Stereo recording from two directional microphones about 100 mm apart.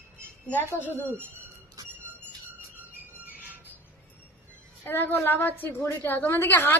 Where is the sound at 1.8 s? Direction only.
35° right (ahead or behind).